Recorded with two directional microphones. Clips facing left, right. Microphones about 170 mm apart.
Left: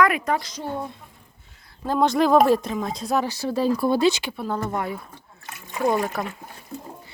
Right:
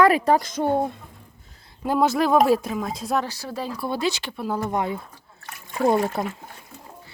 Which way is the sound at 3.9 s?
25° left (ahead or behind).